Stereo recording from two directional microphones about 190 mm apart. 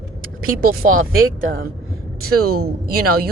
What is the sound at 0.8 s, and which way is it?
Speech, 90° right.